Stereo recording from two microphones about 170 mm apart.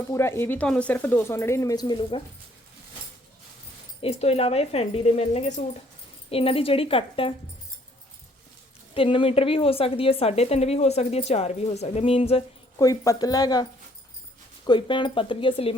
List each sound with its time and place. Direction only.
0.1 s speech: 15° left (ahead or behind); by 2.2 s 30° left (ahead or behind)
4.0 s a woman's voice: 35° left (ahead or behind)
9.0 s a woman's voice: 30° left (ahead or behind)
12.8 s speech: 20° left (ahead or behind)